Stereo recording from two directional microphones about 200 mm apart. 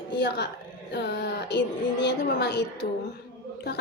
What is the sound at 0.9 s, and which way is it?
A woman's voice, 55° left (ahead or behind).